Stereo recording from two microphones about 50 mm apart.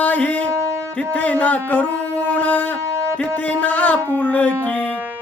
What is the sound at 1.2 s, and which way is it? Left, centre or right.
Speech, left.